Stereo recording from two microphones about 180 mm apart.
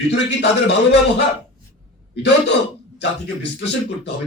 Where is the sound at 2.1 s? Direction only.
75° left (ahead or behind).